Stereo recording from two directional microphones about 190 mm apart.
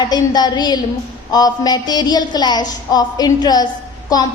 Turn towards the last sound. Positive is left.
turn(degrees=20)  # may be behind; listen again after turning